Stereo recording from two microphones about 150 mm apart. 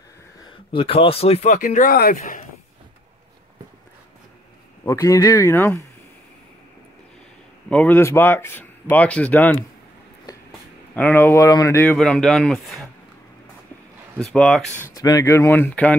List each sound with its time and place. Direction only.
0.7 s speech: 35° left (ahead or behind); by 2.4 s 70° left (ahead or behind)
4.8 s speech: 20° left (ahead or behind)
7.7 s speech: 10° left (ahead or behind)
11.0 s speech: 15° left (ahead or behind)
14.1 s speech: 5° left (ahead or behind)
15.0 s speech: 25° left (ahead or behind)